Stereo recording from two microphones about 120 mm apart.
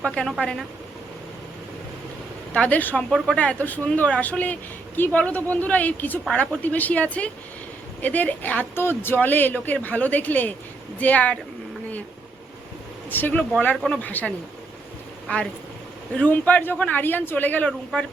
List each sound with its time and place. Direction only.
0.0 s a woman's voice: 5° left (ahead or behind)
2.5 s speech: 10° left (ahead or behind)
3.1 s a woman's voice: centre (ahead or behind)
3.3 s speech: 10° left (ahead or behind)
13.1 s speech: 15° left (ahead or behind)